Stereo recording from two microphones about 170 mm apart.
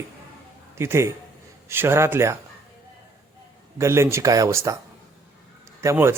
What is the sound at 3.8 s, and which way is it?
Speech, 15° right (ahead or behind).